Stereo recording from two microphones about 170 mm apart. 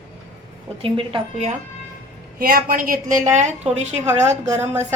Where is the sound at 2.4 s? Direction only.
60° right (ahead or behind); by 4.0 s 45° right (ahead or behind).